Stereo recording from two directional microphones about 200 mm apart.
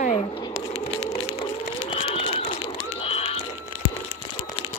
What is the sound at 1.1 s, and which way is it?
Run, 20° left (ahead or behind).